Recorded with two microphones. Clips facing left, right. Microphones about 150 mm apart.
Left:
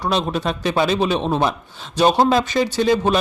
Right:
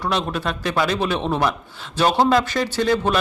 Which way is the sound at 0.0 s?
20° left (ahead or behind).